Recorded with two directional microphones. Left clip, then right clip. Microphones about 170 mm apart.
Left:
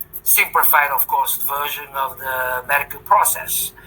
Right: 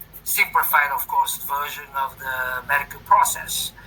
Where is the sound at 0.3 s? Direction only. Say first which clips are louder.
Left 3 dB; 30° left (ahead or behind).